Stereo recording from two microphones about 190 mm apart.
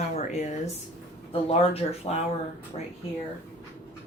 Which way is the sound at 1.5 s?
30° left (ahead or behind).